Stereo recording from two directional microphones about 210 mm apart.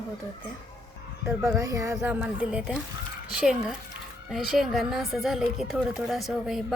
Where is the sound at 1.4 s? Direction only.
15° right (ahead or behind).